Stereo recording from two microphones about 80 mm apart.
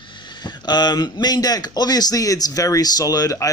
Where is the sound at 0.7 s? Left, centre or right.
Left.